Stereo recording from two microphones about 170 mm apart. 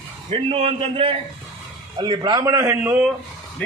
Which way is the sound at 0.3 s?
35° right (ahead or behind).